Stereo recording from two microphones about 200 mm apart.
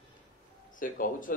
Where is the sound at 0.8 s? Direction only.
40° left (ahead or behind).